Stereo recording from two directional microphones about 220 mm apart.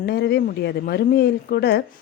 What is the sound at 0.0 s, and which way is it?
Speech, 45° left (ahead or behind).